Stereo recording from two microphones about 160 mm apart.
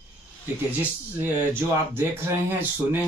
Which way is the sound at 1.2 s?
15° right (ahead or behind).